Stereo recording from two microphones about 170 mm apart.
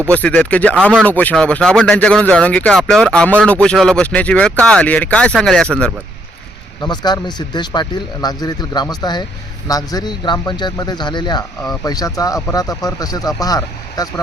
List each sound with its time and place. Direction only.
0.1 s speech: 10° left (ahead or behind)
6.8 s speech: 25° left (ahead or behind)